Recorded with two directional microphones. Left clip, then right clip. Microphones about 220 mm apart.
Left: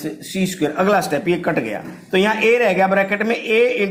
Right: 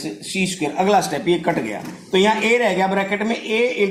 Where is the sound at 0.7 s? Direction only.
35° left (ahead or behind).